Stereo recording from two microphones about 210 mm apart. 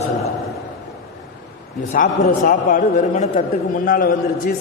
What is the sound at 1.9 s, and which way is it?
A man's voice, 40° left (ahead or behind).